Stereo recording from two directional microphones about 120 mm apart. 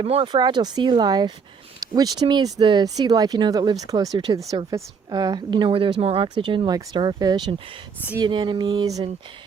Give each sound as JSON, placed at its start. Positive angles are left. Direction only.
{"t": 0.0, "sound": "speech", "side_deg": -55}
{"t": 0.3, "sound": "speech", "side_deg": -40}